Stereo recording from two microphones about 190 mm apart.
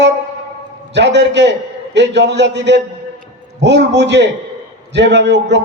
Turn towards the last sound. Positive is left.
turn(degrees=-65)  # may be behind; listen again after turning